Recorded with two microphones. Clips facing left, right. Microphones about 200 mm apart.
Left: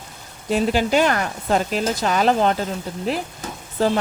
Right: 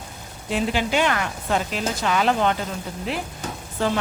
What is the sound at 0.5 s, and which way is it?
Speech, 40° left (ahead or behind).